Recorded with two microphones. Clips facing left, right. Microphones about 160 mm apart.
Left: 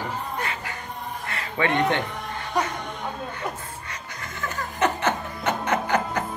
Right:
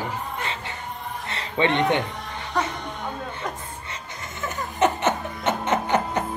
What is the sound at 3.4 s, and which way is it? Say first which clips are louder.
Chuckle: left 1 dB; 5° left (ahead or behind).